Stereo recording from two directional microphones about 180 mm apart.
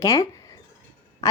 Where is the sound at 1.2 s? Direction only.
20° left (ahead or behind).